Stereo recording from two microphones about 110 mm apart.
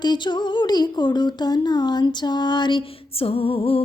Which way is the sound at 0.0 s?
40° left (ahead or behind).